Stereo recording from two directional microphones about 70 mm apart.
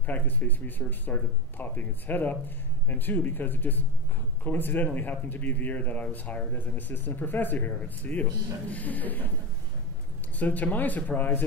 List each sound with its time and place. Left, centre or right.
0.0 s speech: left
10.4 s speech: left